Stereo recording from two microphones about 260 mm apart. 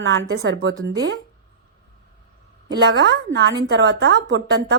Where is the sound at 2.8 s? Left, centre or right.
Right.